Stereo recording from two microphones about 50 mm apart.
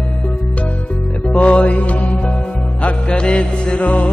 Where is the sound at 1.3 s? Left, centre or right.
Left.